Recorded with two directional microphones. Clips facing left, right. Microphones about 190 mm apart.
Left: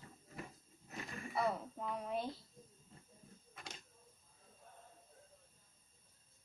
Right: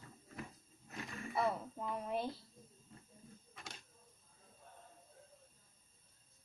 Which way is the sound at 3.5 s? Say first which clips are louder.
Left 1 dB; centre (ahead or behind).